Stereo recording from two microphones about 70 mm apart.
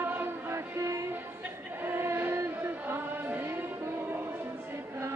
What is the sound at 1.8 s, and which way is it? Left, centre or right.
Female singing, right.